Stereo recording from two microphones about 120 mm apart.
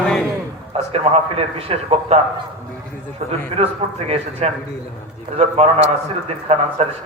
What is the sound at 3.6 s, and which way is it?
A man's voice, 60° right (ahead or behind).